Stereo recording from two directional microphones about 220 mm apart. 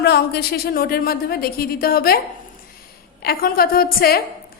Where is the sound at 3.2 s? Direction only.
40° left (ahead or behind).